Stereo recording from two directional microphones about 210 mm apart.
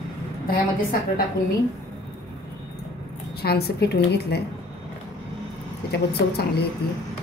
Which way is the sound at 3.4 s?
50° left (ahead or behind).